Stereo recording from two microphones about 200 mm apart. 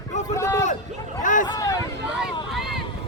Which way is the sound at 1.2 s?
40° left (ahead or behind).